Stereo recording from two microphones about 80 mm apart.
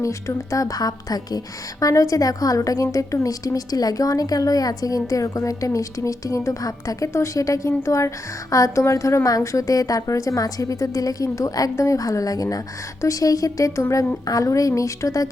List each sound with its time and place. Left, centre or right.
0.0 s a woman's voice: left
1.8 s a woman's voice: left